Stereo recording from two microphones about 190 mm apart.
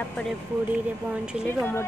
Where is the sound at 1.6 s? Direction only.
10° left (ahead or behind).